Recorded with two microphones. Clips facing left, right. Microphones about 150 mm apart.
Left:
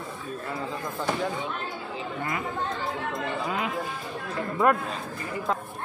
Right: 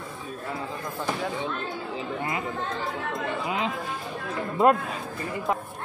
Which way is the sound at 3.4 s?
20° right (ahead or behind).